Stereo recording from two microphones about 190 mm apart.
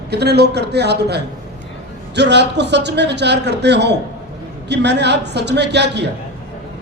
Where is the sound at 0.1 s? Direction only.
60° right (ahead or behind).